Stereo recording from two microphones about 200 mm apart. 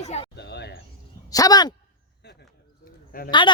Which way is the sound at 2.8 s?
45° left (ahead or behind).